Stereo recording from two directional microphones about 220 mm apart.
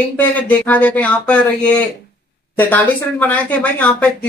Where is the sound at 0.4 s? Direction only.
5° left (ahead or behind).